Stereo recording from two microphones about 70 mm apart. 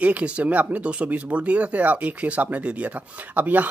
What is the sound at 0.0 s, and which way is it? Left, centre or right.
Speech, right.